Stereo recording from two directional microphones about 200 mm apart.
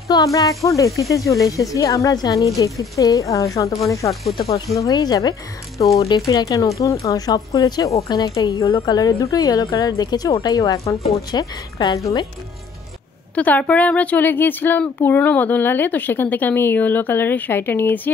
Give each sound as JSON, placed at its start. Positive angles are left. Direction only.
{"t": 0.1, "sound": "a woman's voice", "side_deg": 20}
{"t": 4.1, "sound": "speech", "side_deg": 0}
{"t": 4.7, "sound": "a woman's voice", "side_deg": 20}
{"t": 13.3, "sound": "a woman's voice", "side_deg": 5}